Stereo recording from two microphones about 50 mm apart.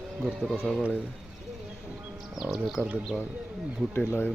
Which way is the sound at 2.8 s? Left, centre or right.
Centre.